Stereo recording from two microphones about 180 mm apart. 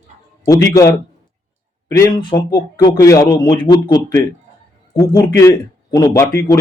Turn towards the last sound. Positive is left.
turn(degrees=20)  # may be behind; listen again after turning